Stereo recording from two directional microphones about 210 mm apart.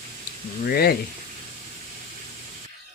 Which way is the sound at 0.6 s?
45° left (ahead or behind).